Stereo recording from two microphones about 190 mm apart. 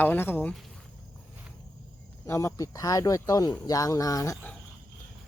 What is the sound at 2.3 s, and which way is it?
Speech, 15° left (ahead or behind).